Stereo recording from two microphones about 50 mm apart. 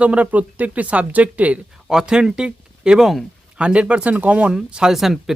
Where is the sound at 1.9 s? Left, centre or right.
Centre.